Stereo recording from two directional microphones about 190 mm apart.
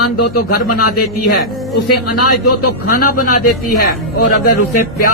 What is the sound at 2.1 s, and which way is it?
A man's voice, 50° left (ahead or behind).